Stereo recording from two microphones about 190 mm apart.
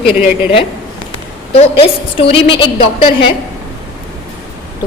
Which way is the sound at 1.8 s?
30° left (ahead or behind).